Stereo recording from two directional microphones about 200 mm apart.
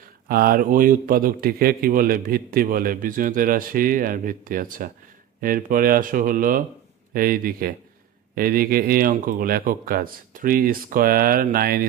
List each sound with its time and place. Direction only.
0.0 s speech: 50° right (ahead or behind)